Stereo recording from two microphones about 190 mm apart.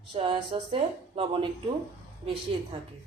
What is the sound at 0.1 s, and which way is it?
Speech, 30° right (ahead or behind).